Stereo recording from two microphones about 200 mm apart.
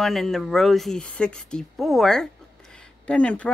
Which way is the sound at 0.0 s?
Centre (ahead or behind).